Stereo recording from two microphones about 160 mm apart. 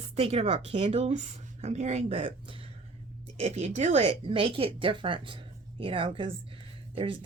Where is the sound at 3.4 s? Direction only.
40° right (ahead or behind).